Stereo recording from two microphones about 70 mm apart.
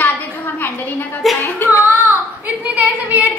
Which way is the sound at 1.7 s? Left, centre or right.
Right.